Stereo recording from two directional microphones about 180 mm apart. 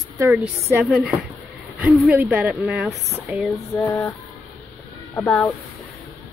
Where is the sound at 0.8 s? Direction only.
Centre (ahead or behind).